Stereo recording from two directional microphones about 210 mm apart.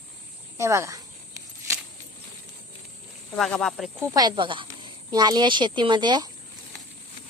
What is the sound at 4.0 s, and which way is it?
Speech, 20° right (ahead or behind).